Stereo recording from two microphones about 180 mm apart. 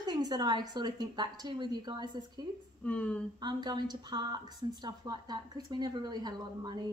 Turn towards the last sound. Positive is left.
turn(degrees=-25)  # may be behind; listen again after turning